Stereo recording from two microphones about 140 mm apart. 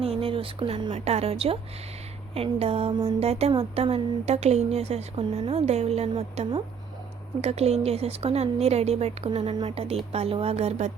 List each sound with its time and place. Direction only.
0.0 s speech: 40° right (ahead or behind)
0.9 s speech: 50° right (ahead or behind)